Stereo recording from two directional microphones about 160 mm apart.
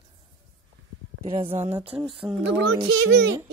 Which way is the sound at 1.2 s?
35° right (ahead or behind).